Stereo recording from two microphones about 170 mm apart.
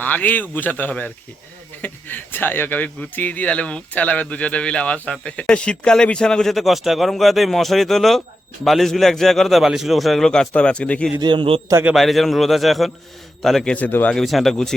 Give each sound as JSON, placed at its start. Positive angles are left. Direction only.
{"t": 0.0, "sound": "speech", "side_deg": 10}
{"t": 11.2, "sound": "a man's voice", "side_deg": -25}
{"t": 11.7, "sound": "a man's voice", "side_deg": -10}
{"t": 11.9, "sound": "speech", "side_deg": 0}